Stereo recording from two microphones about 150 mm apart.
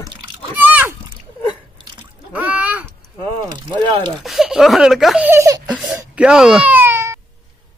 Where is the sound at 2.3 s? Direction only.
10° right (ahead or behind).